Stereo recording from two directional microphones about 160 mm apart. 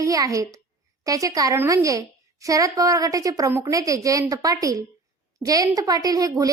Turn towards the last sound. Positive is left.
turn(degrees=-20)  # may be behind; listen again after turning